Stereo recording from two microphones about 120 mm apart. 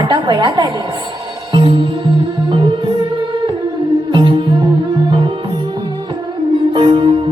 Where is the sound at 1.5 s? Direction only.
45° right (ahead or behind).